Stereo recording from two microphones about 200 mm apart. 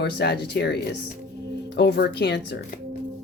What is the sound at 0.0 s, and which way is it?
Speech, 55° left (ahead or behind).